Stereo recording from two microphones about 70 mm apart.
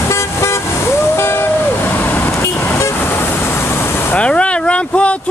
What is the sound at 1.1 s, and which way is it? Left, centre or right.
Music, left.